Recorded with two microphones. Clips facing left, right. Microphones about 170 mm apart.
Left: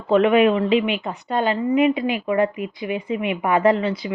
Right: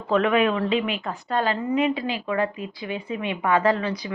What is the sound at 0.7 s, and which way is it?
Speech, 35° right (ahead or behind).